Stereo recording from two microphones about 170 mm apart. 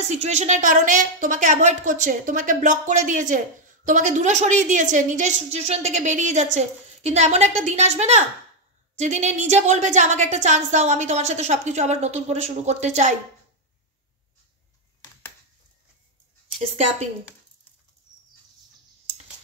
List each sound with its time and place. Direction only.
0.0 s a woman's voice: 40° right (ahead or behind)